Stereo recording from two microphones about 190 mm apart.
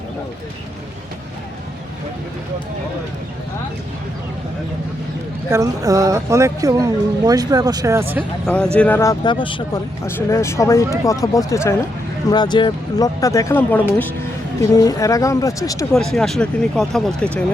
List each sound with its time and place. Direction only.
5.5 s speech: 15° right (ahead or behind)
8.4 s speech: 5° left (ahead or behind); by 9.8 s 25° left (ahead or behind)
10.2 s speech: 15° left (ahead or behind)
15.9 s speech: centre (ahead or behind)